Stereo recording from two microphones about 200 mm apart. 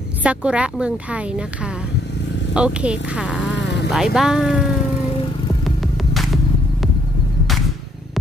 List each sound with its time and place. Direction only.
0.2 s a woman's voice: 5° right (ahead or behind)
2.5 s a woman's voice: 5° right (ahead or behind)
3.5 s a sound: 60° left (ahead or behind)
3.9 s a woman's voice: centre (ahead or behind)